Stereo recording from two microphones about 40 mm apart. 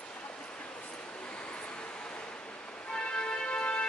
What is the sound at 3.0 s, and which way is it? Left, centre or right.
Music, left.